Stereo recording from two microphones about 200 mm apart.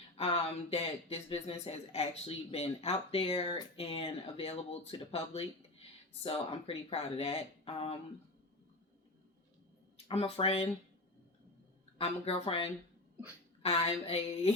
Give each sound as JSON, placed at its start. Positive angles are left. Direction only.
{"t": 0.7, "sound": "speech", "side_deg": 30}
{"t": 10.1, "sound": "speech", "side_deg": 30}
{"t": 11.9, "sound": "speech", "side_deg": 30}